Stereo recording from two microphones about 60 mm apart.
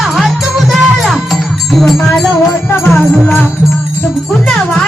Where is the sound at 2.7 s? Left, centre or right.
Left.